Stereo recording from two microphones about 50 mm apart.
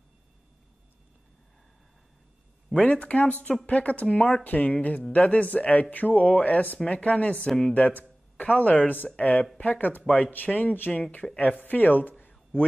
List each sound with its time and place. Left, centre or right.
2.7 s speech: left
7.4 s speech: centre
7.7 s a man's voice: left